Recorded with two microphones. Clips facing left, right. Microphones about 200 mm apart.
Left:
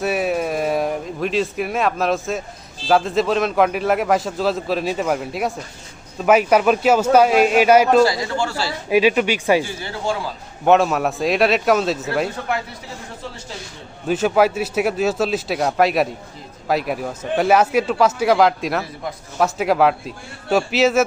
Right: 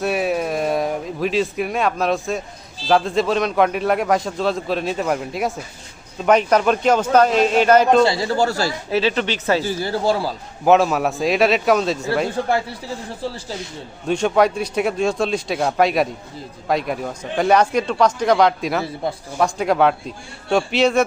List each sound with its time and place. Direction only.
0.0 s a man's voice: centre (ahead or behind)
8.0 s speech: 30° right (ahead or behind)
8.9 s a man's voice: 15° left (ahead or behind)
9.6 s speech: 40° right (ahead or behind)
10.7 s a man's voice: centre (ahead or behind)
12.4 s speech: 35° right (ahead or behind)
14.1 s a man's voice: 5° left (ahead or behind)